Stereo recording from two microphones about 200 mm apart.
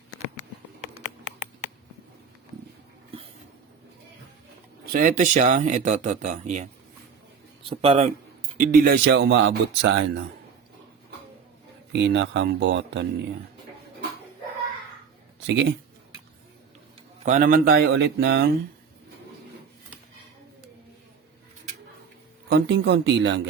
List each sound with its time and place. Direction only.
4.9 s speech: 40° right (ahead or behind)
7.7 s speech: 30° right (ahead or behind)
8.5 s speech: 45° right (ahead or behind); by 10.2 s 65° right (ahead or behind)
11.9 s speech: 65° right (ahead or behind)
15.4 s speech: 60° right (ahead or behind)
17.2 s speech: 40° right (ahead or behind); by 18.4 s 55° right (ahead or behind)
22.4 s speech: 60° right (ahead or behind)